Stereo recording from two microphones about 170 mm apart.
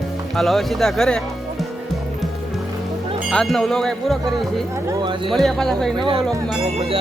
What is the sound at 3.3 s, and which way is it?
Speech, centre (ahead or behind).